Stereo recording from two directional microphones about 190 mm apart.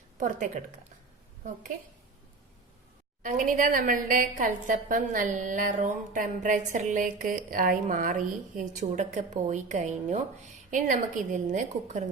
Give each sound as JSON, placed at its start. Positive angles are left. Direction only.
{"t": 0.2, "sound": "a woman's voice", "side_deg": -40}
{"t": 3.2, "sound": "a woman's voice", "side_deg": -40}